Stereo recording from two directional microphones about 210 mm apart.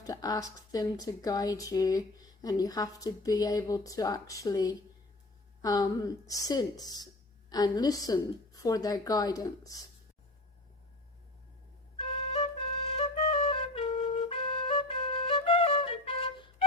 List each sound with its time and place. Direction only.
0.0 s speech: 15° left (ahead or behind)
11.9 s flute: 25° left (ahead or behind)